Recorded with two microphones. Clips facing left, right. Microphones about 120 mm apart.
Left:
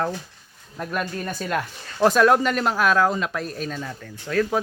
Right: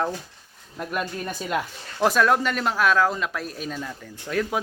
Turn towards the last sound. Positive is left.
turn(degrees=-10)  # may be behind; listen again after turning